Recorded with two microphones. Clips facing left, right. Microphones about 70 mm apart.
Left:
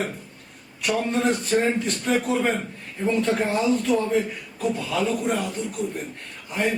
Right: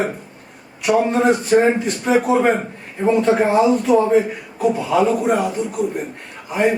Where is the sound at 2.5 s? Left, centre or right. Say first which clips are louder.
Right 6 dB; right.